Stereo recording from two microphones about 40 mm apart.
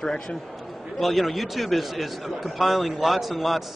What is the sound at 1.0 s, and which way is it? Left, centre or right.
A man's voice, centre.